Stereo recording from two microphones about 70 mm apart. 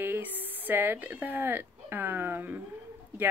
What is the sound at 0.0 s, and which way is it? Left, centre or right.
Speech, right.